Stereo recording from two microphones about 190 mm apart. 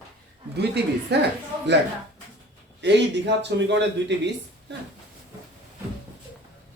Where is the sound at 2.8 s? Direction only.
65° right (ahead or behind).